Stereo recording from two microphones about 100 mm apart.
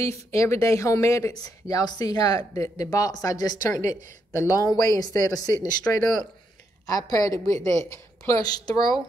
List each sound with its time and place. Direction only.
0.0 s speech: 30° left (ahead or behind)